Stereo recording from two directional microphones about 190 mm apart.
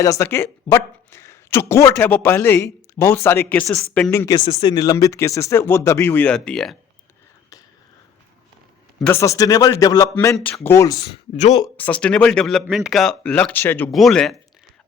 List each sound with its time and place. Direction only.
0.0 s a woman's voice: 15° left (ahead or behind)
4.4 s a woman's voice: 25° left (ahead or behind); by 6.7 s 5° left (ahead or behind)
9.2 s a woman's voice: 15° left (ahead or behind)
11.0 s speech: 35° left (ahead or behind)
11.8 s speech: 5° left (ahead or behind)